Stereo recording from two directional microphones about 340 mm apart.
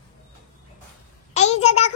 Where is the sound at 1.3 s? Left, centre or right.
Centre.